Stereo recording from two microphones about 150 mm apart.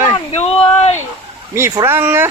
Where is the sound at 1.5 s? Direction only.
15° right (ahead or behind).